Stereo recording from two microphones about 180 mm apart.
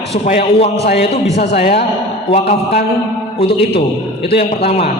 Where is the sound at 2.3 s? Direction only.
35° left (ahead or behind).